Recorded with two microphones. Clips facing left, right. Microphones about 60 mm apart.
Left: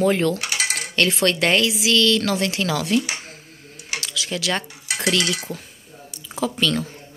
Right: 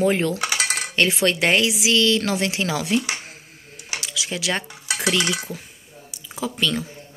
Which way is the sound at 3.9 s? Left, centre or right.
Centre.